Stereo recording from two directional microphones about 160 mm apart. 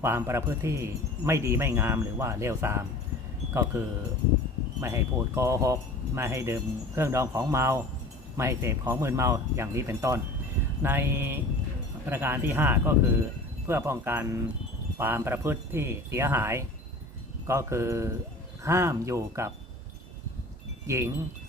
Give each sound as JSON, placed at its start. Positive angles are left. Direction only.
{"t": 0.0, "sound": "speech", "side_deg": -15}
{"t": 20.8, "sound": "speech", "side_deg": -20}